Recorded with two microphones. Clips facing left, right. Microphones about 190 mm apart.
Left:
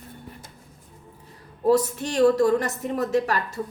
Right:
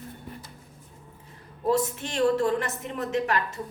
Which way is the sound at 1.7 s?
40° left (ahead or behind).